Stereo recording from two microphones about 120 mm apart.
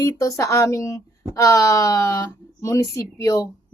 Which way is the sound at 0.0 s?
25° left (ahead or behind).